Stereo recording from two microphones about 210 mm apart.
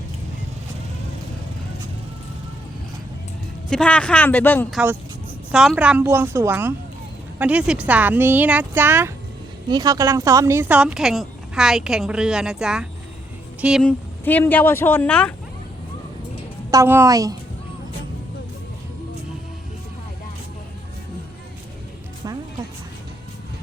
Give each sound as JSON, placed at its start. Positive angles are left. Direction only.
{"t": 3.7, "sound": "speech", "side_deg": 5}
{"t": 5.5, "sound": "speech", "side_deg": -5}
{"t": 14.3, "sound": "speech", "side_deg": 10}
{"t": 16.7, "sound": "speech", "side_deg": -10}